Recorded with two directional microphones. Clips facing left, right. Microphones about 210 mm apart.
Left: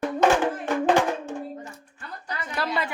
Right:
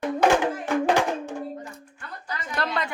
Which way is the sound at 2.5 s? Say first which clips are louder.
Even; 5° left (ahead or behind).